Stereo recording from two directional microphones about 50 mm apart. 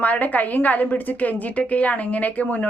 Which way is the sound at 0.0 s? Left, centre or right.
Left.